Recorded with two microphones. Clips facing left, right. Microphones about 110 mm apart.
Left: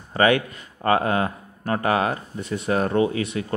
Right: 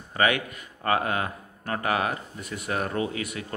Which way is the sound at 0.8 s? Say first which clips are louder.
Left 5 dB; 30° left (ahead or behind).